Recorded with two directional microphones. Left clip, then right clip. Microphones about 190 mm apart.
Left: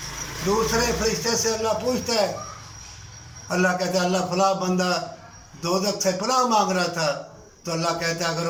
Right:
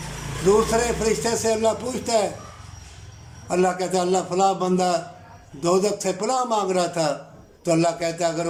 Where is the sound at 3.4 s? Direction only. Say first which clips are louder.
Right 1 dB; 25° right (ahead or behind).